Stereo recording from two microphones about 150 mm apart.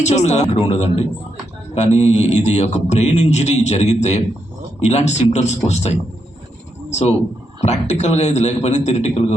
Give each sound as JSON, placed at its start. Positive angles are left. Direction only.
{"t": 0.0, "sound": "a man's voice", "side_deg": 50}